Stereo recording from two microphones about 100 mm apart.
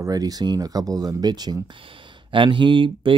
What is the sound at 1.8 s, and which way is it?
Speech, 60° right (ahead or behind).